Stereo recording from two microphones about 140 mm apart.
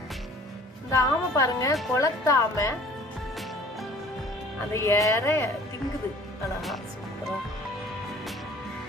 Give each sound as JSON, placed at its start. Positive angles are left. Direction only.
{"t": 0.9, "sound": "speech", "side_deg": 25}
{"t": 4.7, "sound": "speech", "side_deg": 20}